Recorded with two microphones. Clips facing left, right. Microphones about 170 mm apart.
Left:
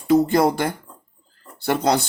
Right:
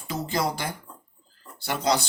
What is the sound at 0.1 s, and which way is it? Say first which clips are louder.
Speech: left 12 dB; 55° left (ahead or behind).